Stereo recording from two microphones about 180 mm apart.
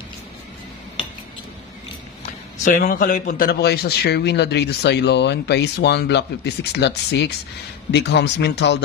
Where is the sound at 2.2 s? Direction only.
45° left (ahead or behind).